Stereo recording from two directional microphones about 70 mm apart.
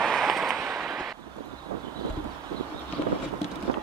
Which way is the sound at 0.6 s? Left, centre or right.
Centre.